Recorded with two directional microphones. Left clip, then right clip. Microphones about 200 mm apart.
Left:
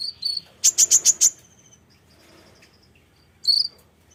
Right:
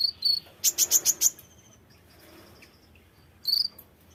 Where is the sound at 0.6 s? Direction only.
5° left (ahead or behind).